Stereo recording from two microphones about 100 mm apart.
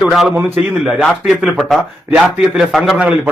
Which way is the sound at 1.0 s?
Centre (ahead or behind).